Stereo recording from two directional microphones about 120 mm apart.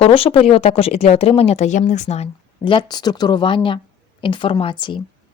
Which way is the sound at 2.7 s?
40° left (ahead or behind).